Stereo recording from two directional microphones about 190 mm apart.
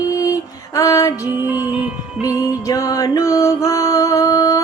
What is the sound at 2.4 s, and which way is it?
Mantra, 20° left (ahead or behind).